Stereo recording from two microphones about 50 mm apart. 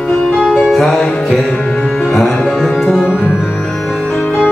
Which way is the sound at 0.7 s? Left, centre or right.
Centre.